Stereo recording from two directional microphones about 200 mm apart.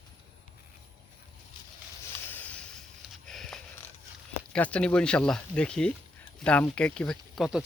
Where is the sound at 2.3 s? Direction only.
10° left (ahead or behind).